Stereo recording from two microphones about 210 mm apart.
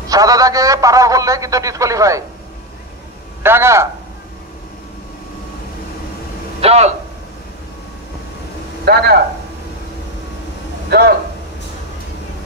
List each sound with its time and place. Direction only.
0.1 s a man's voice: 15° right (ahead or behind)
3.4 s a man's voice: 10° right (ahead or behind)
6.6 s a man's voice: 30° right (ahead or behind)
8.8 s a man's voice: 50° right (ahead or behind)
10.9 s speech: 45° right (ahead or behind)